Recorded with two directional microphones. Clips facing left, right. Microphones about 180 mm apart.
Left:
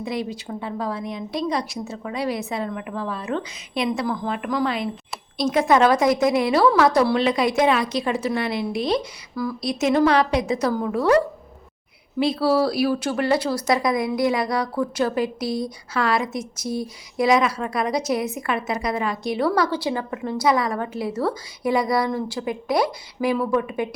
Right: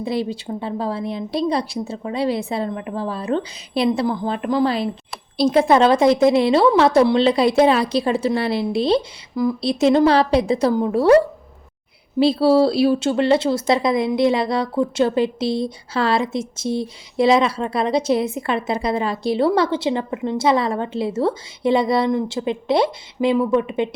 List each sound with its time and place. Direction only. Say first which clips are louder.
0.0 s speech: right 4 dB; 30° right (ahead or behind)
9.3 s speech: right 6 dB; 20° right (ahead or behind)
12.2 s speech: right 5 dB; 30° right (ahead or behind)